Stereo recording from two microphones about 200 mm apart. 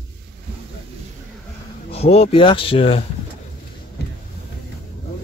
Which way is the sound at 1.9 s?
30° left (ahead or behind).